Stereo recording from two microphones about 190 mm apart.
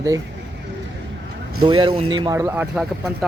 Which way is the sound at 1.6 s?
25° right (ahead or behind).